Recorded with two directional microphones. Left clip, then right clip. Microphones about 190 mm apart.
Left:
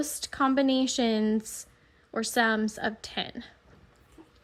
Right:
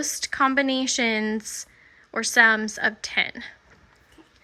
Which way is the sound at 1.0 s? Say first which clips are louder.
Right 3 dB; 20° right (ahead or behind).